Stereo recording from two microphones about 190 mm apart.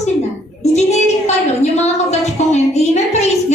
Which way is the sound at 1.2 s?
35° left (ahead or behind).